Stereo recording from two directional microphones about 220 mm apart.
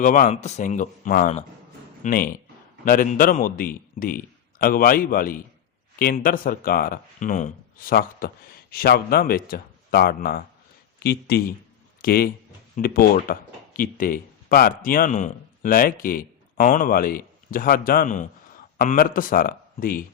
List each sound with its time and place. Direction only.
0.0 s speech: 35° left (ahead or behind)